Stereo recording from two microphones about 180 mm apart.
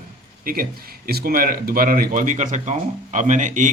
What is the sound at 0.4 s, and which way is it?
Speech, 55° right (ahead or behind).